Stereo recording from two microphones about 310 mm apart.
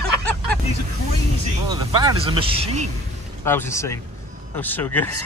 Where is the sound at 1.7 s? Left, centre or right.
Centre.